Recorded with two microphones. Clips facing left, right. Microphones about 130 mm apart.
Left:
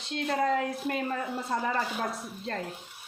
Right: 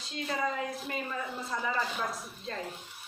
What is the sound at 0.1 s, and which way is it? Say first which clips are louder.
A man's voice: left 6 dB; 60° left (ahead or behind).